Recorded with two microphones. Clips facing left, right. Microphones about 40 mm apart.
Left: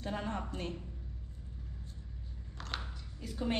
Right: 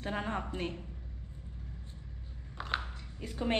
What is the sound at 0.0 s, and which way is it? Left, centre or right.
Speech, right.